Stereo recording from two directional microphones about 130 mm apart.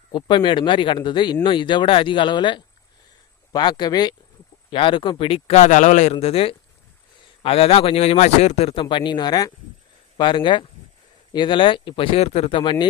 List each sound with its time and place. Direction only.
0.1 s speech: 40° left (ahead or behind); by 8.8 s 55° left (ahead or behind)
8.8 s speech: 40° left (ahead or behind)